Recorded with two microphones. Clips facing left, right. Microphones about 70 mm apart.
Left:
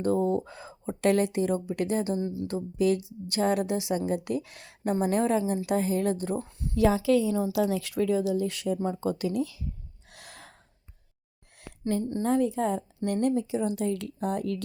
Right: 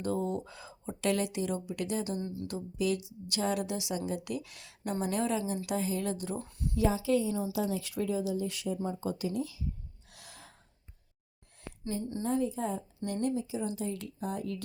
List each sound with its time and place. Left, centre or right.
0.0 s speech: left
2.2 s speech: centre
2.5 s speech: left
6.7 s a woman's voice: left
10.1 s gasp: left
12.2 s speech: left